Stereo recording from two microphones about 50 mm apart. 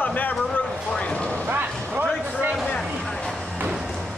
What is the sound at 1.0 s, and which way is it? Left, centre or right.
Vehicle, left.